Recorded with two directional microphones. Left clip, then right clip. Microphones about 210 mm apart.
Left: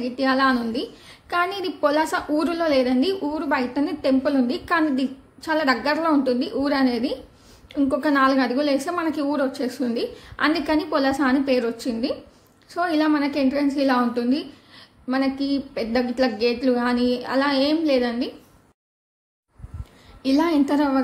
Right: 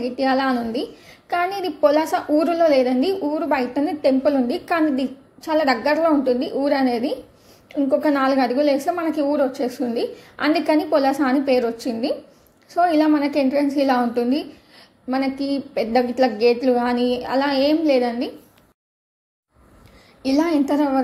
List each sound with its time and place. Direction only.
0.0 s a woman's voice: 10° right (ahead or behind)
20.2 s a woman's voice: 10° right (ahead or behind)